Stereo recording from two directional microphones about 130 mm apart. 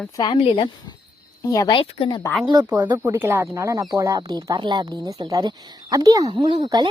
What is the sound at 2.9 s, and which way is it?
Speech, 15° right (ahead or behind).